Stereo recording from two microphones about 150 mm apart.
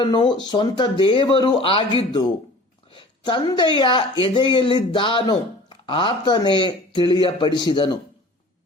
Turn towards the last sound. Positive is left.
turn(degrees=30)  # may be behind; listen again after turning